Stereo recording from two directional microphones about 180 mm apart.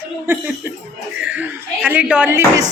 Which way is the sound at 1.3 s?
10° right (ahead or behind).